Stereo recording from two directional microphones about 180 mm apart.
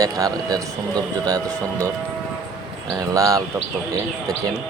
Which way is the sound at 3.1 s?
20° right (ahead or behind).